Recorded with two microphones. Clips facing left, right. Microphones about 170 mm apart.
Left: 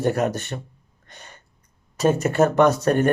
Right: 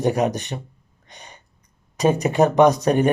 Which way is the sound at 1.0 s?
15° right (ahead or behind).